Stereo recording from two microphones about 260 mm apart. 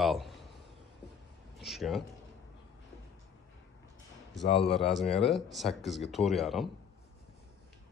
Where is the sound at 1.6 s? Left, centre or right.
Centre.